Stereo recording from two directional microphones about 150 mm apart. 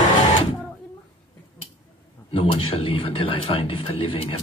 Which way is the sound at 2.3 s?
35° left (ahead or behind).